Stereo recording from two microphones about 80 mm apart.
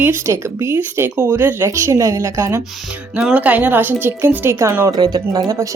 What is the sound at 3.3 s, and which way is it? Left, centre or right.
Speech, centre.